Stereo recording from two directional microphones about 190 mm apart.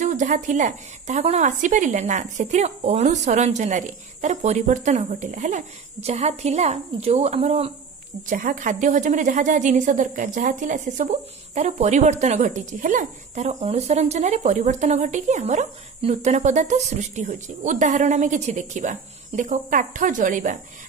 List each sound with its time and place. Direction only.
0.0 s a woman's voice: 40° right (ahead or behind)
8.3 s a woman's voice: 40° right (ahead or behind)